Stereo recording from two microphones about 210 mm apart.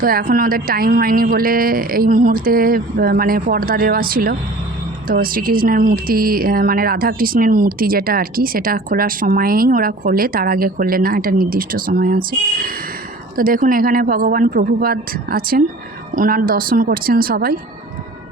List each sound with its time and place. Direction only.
0.0 s speech: 45° right (ahead or behind)